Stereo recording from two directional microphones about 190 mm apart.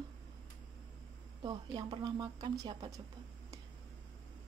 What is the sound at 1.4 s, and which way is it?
A woman's voice, 25° right (ahead or behind).